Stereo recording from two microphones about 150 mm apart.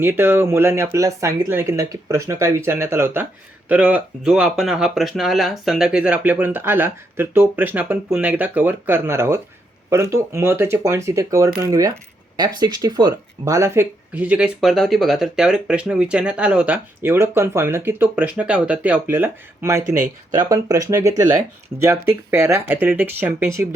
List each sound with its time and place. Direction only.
0.0 s speech: 15° right (ahead or behind)